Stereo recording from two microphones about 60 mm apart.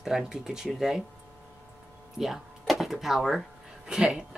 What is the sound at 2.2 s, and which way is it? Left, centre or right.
A woman's voice, centre.